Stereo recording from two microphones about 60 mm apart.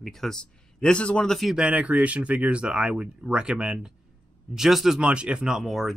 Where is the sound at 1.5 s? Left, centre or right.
Centre.